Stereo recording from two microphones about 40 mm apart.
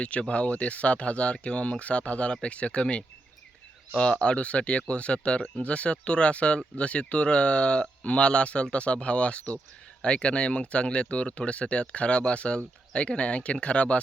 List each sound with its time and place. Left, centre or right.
0.0 s speech: left
3.9 s speech: left